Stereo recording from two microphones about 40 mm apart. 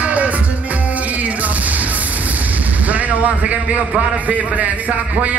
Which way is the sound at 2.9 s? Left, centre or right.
Right.